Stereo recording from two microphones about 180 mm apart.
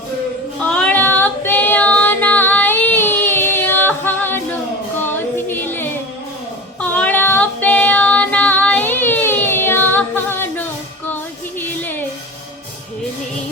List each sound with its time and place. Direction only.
0.6 s female singing: 5° left (ahead or behind)
6.7 s child singing: 10° left (ahead or behind)
11.6 s a sound: 10° left (ahead or behind)